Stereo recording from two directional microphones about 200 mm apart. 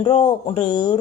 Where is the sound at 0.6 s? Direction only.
20° left (ahead or behind).